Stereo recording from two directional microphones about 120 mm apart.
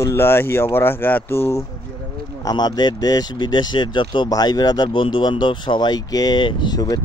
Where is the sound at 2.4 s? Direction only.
35° left (ahead or behind).